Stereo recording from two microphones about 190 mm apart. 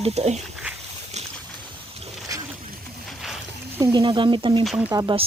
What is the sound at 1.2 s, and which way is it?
Boat, 35° right (ahead or behind).